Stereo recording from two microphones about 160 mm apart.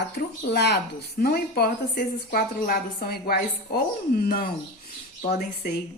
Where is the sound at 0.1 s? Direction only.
90° left.